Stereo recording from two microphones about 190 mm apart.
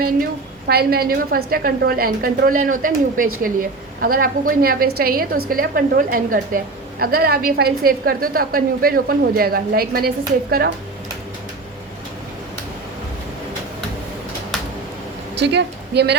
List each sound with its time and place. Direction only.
0.7 s a woman's voice: 55° right (ahead or behind)
15.4 s speech: 65° right (ahead or behind)